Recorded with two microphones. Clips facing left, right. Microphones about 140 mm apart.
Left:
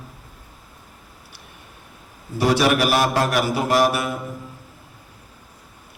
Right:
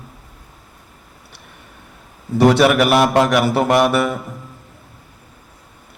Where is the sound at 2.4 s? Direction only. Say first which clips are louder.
Right 6 dB; 65° right (ahead or behind).